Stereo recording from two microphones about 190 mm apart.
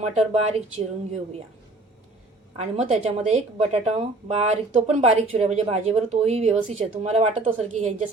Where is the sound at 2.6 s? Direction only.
35° right (ahead or behind).